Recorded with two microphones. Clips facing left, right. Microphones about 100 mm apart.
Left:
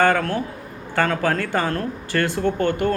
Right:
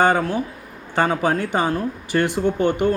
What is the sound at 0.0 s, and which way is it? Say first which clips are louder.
Speech: right 1 dB; 15° right (ahead or behind).